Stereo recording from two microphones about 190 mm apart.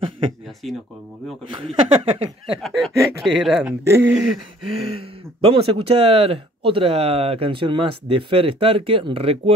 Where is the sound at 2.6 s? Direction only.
Centre (ahead or behind).